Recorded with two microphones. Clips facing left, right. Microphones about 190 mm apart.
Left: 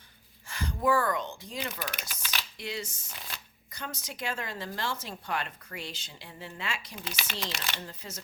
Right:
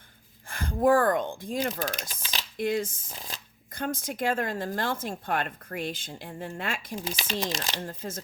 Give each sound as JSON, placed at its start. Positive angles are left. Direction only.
{"t": 0.4, "sound": "speech", "side_deg": -50}
{"t": 2.6, "sound": "speech", "side_deg": -50}
{"t": 3.1, "sound": "speech", "side_deg": -35}
{"t": 3.8, "sound": "speech", "side_deg": -50}